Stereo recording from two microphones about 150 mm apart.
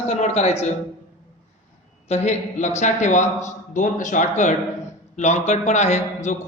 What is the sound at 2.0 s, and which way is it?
A man's voice, 45° left (ahead or behind).